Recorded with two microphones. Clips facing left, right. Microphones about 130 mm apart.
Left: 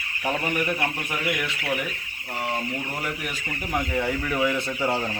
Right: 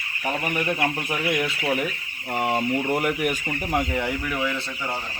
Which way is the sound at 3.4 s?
20° right (ahead or behind).